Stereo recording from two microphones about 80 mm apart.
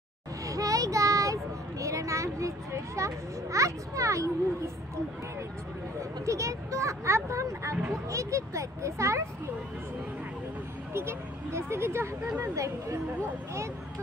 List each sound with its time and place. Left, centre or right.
0.5 s a sound: right
3.5 s speech: right
5.9 s speech: right
10.9 s speech: right